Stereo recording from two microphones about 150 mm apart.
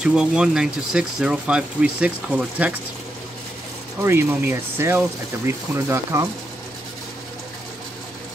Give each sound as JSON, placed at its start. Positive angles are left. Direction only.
{"t": 0.0, "sound": "speech", "side_deg": -5}
{"t": 4.0, "sound": "speech", "side_deg": -15}